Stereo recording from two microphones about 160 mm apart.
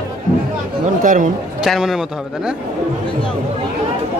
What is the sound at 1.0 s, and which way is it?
Speech, 55° right (ahead or behind).